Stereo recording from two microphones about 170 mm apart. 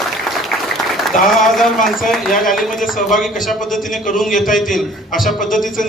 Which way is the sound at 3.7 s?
50° left (ahead or behind).